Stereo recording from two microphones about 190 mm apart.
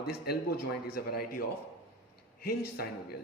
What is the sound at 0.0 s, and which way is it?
A man's voice, 55° left (ahead or behind).